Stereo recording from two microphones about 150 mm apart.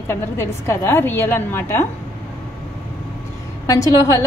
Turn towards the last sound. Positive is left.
turn(degrees=20)  # may be behind; listen again after turning